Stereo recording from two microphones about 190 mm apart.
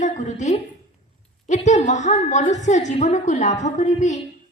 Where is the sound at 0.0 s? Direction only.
40° left (ahead or behind).